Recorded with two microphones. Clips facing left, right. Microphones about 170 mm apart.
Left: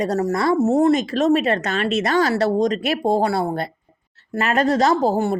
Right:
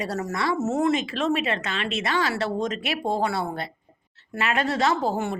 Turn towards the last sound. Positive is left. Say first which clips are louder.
# left 6 dB
turn(degrees=35)  # may be behind; listen again after turning